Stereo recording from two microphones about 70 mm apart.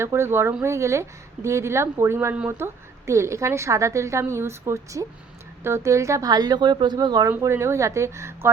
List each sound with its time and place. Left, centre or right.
0.0 s a woman's voice: right
6.2 s speech: right
7.3 s a woman's voice: right